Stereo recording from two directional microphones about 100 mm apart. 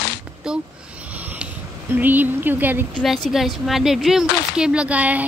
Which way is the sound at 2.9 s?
Centre (ahead or behind).